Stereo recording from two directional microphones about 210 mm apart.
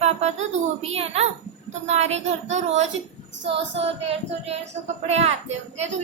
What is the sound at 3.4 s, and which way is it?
Child singing, 25° right (ahead or behind).